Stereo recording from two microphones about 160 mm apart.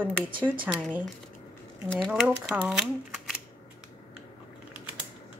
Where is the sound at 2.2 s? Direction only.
10° right (ahead or behind).